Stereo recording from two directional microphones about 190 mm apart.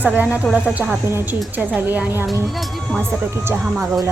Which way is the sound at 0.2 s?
10° right (ahead or behind).